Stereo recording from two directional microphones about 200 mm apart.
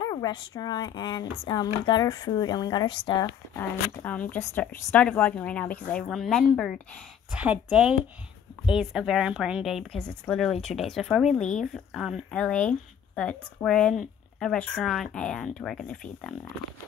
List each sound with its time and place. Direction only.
0.0 s speech: 20° left (ahead or behind)
3.5 s a woman's voice: 5° left (ahead or behind)